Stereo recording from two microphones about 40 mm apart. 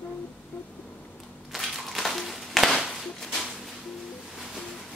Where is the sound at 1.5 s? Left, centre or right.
Centre.